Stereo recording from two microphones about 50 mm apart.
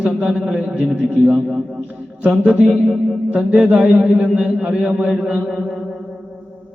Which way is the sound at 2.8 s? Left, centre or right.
Centre.